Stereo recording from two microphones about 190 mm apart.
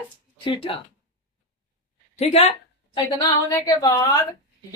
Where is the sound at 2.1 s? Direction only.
35° left (ahead or behind).